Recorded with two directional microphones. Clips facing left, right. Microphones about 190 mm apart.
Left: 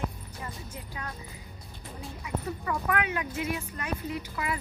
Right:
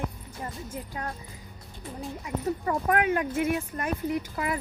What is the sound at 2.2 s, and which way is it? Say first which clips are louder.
Speech: right 4 dB; 40° right (ahead or behind).